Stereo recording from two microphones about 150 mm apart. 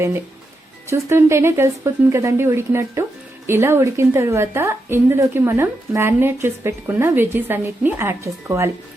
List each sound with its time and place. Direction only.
0.9 s a woman's voice: 20° right (ahead or behind)